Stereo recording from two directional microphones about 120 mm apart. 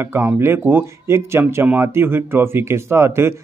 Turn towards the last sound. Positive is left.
turn(degrees=-20)  # may be behind; listen again after turning